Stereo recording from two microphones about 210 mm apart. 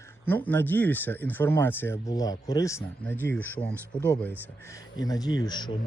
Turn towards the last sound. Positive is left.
turn(degrees=20)  # may be behind; listen again after turning